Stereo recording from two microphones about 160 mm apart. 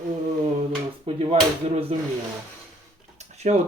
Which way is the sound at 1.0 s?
35° right (ahead or behind).